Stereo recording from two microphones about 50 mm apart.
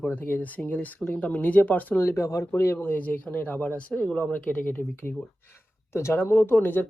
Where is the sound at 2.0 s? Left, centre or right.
Left.